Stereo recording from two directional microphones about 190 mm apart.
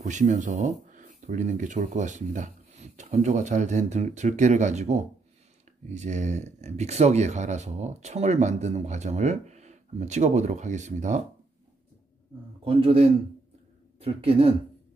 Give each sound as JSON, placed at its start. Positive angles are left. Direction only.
{"t": 0.0, "sound": "speech", "side_deg": -40}
{"t": 12.6, "sound": "speech", "side_deg": -30}